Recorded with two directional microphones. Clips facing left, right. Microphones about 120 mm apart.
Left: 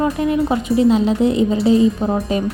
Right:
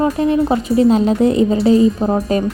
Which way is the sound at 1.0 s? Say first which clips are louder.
Right 2 dB; 45° right (ahead or behind).